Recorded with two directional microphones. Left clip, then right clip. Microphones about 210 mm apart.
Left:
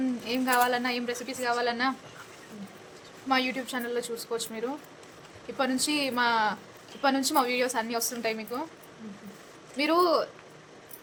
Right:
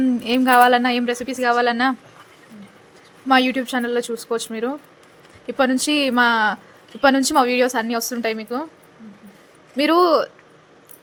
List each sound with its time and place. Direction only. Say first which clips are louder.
0.3 s a woman's voice: right 12 dB; 35° right (ahead or behind)
3.2 s a woman's voice: right 11 dB; 35° right (ahead or behind)
9.7 s a woman's voice: right 8 dB; 35° right (ahead or behind)